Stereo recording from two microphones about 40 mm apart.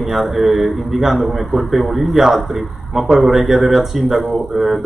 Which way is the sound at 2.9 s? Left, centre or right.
Right.